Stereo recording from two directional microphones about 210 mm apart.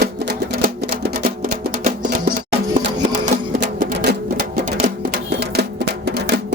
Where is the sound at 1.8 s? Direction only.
40° right (ahead or behind).